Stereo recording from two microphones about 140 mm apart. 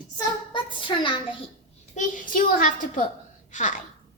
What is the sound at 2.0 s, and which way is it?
Speech, 80° left.